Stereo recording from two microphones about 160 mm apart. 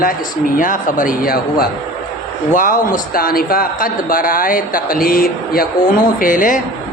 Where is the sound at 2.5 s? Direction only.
55° left (ahead or behind).